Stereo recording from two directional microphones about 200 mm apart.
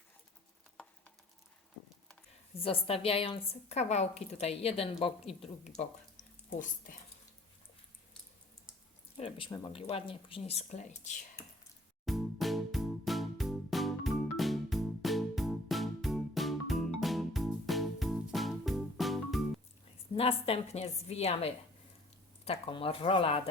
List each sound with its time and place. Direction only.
2.6 s a woman's voice: 30° left (ahead or behind)
9.1 s a woman's voice: 25° left (ahead or behind)
12.0 s music: centre (ahead or behind)
20.1 s a woman's voice: 30° left (ahead or behind)